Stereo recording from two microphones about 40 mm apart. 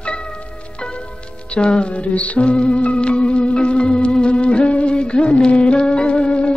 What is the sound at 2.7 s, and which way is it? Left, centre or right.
Music, left.